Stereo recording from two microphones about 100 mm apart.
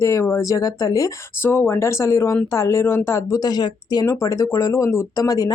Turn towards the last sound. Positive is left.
turn(degrees=35)  # may be behind; listen again after turning